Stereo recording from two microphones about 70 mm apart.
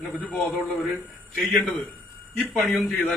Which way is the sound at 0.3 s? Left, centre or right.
Centre.